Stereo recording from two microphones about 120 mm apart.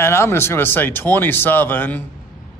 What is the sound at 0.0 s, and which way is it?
Speech, 20° left (ahead or behind).